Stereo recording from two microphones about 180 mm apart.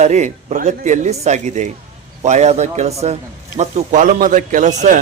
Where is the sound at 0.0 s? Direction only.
40° right (ahead or behind).